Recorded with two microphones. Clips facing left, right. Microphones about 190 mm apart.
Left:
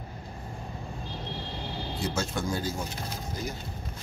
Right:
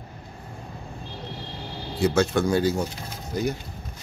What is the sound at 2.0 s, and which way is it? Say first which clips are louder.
Speech: right 11 dB; 65° right (ahead or behind).